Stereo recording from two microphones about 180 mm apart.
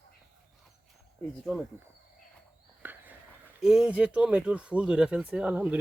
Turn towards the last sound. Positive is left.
turn(degrees=-5)  # may be behind; listen again after turning